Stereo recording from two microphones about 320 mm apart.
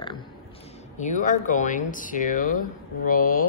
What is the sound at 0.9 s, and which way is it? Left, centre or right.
Speech, left.